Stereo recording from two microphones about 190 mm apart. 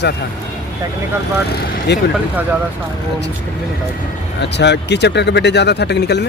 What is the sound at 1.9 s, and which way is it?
Speech, 65° left (ahead or behind).